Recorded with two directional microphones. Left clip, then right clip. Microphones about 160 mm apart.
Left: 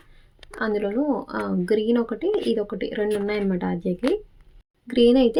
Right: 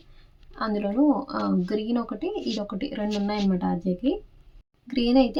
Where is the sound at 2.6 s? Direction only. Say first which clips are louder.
Left 5 dB; 15° left (ahead or behind).